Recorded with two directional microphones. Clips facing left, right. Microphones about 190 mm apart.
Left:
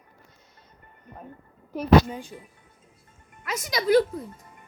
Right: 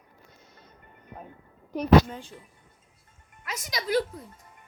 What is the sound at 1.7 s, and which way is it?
Speech, 5° left (ahead or behind).